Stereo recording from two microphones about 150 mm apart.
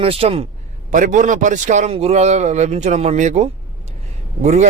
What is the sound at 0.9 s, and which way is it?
A man's voice, 60° right (ahead or behind).